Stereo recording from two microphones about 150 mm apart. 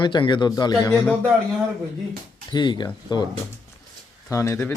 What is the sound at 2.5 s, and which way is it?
Speech, 30° left (ahead or behind).